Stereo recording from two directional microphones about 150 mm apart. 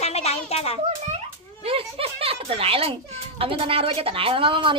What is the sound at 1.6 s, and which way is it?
A woman's voice, 40° right (ahead or behind).